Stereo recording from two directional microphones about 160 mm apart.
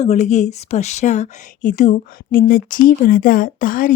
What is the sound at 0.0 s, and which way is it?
A woman's voice, 45° left (ahead or behind).